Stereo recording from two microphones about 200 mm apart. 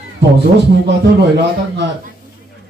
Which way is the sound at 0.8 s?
60° right (ahead or behind).